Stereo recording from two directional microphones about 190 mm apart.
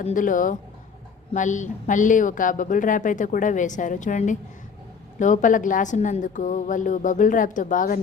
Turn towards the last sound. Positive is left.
turn(degrees=45)  # may be behind; listen again after turning